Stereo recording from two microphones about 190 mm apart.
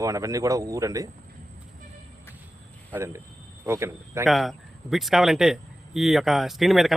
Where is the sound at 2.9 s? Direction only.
15° right (ahead or behind).